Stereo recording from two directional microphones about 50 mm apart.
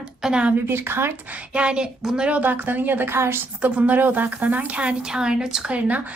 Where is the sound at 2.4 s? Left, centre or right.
Right.